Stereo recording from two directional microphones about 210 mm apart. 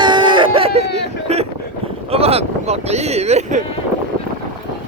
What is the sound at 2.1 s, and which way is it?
Vehicle, 30° right (ahead or behind).